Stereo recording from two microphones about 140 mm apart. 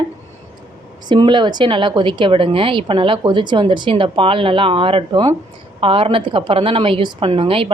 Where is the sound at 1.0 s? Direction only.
35° right (ahead or behind).